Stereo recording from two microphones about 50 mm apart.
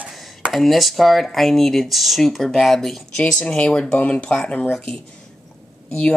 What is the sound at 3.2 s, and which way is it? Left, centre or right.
Speech, centre.